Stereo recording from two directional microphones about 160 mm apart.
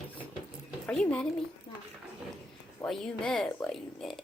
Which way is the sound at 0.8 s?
5° left (ahead or behind).